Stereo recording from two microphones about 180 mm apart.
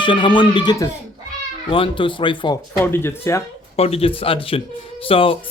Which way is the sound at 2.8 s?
15° left (ahead or behind).